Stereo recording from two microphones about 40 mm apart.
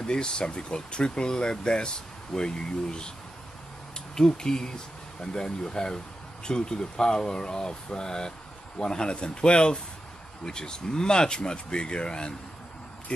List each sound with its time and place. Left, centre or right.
0.0 s speech: centre
4.1 s speech: centre